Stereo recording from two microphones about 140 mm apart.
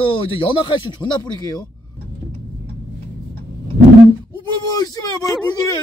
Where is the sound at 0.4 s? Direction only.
35° left (ahead or behind).